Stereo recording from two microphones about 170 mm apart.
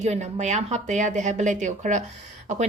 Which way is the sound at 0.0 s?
40° right (ahead or behind).